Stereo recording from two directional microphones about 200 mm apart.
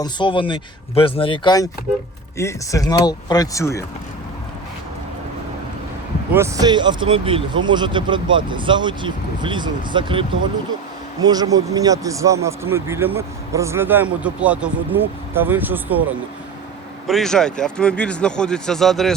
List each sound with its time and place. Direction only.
0.0 s speech: 25° left (ahead or behind)
6.3 s a man's voice: 15° right (ahead or behind)
17.1 s speech: centre (ahead or behind)